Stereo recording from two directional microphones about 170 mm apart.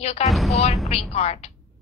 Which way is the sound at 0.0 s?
40° left (ahead or behind).